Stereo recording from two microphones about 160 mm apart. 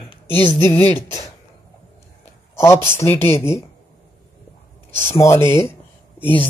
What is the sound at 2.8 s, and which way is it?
Speech, 15° left (ahead or behind).